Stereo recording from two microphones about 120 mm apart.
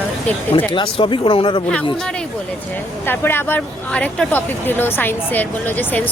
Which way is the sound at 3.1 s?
15° left (ahead or behind).